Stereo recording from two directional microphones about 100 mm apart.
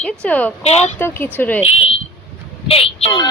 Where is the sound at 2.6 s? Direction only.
75° left (ahead or behind).